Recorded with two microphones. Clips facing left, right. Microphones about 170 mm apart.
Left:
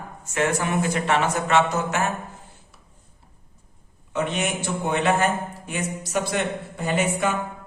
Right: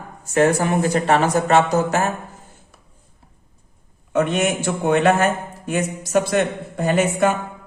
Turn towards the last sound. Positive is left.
turn(degrees=-50)  # may be behind; listen again after turning